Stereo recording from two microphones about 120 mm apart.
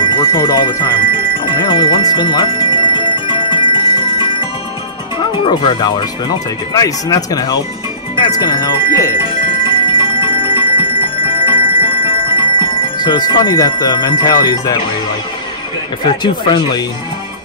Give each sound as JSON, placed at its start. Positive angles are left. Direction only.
{"t": 0.0, "sound": "alarm clock", "side_deg": 50}
{"t": 0.4, "sound": "speech", "side_deg": 30}
{"t": 1.4, "sound": "music", "side_deg": 45}
{"t": 5.3, "sound": "speech", "side_deg": 40}
{"t": 9.7, "sound": "music", "side_deg": 45}
{"t": 16.0, "sound": "speech", "side_deg": 40}